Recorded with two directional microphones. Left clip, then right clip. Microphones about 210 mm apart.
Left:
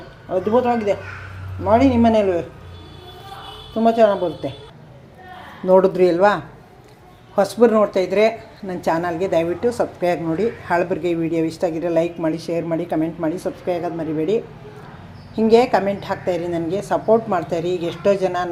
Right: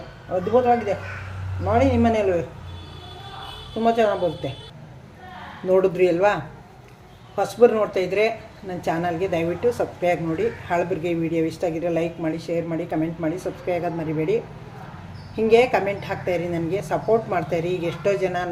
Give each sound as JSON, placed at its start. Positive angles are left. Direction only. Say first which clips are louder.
{"t": 0.5, "sound": "speech", "louder": "even", "side_deg": 30}
{"t": 3.8, "sound": "speech", "louder": "left 4 dB", "side_deg": 15}
{"t": 5.6, "sound": "speech", "louder": "left 4 dB", "side_deg": 20}
{"t": 15.4, "sound": "speech", "louder": "left 2 dB", "side_deg": 20}